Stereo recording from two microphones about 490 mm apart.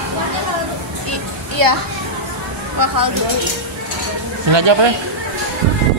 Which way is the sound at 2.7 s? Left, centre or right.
Right.